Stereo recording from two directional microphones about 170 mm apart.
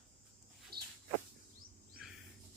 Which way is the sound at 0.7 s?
65° right (ahead or behind).